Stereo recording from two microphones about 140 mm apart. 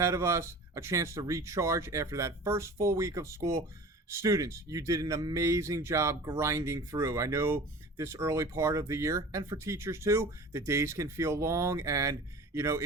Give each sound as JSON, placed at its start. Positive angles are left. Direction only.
{"t": 0.0, "sound": "speech", "side_deg": -20}